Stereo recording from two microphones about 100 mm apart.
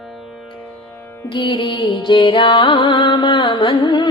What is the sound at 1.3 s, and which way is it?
Music, 55° left (ahead or behind).